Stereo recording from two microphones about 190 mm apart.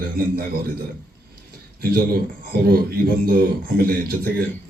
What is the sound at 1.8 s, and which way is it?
A man's voice, 55° right (ahead or behind).